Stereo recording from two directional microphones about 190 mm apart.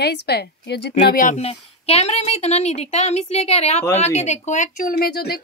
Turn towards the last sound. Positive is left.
turn(degrees=55)  # may be behind; listen again after turning